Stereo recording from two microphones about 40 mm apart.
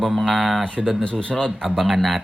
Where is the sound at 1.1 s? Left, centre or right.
Left.